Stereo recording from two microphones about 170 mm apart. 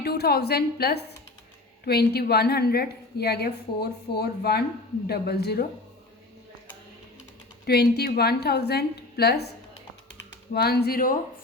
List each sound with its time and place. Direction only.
0.0 s a woman's voice: 70° left (ahead or behind)
7.7 s a woman's voice: 70° left (ahead or behind)
10.5 s speech: 70° left (ahead or behind)